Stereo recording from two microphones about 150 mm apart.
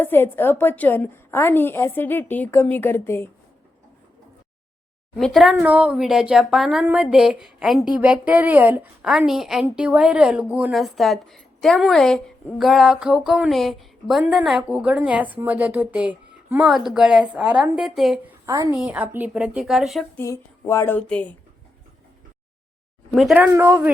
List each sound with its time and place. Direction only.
0.0 s a woman's voice: 15° left (ahead or behind)
5.1 s speech: centre (ahead or behind)
18.4 s a woman's voice: 20° right (ahead or behind)
18.7 s speech: 5° right (ahead or behind)
20.1 s a woman's voice: 20° left (ahead or behind)
23.3 s speech: 15° right (ahead or behind)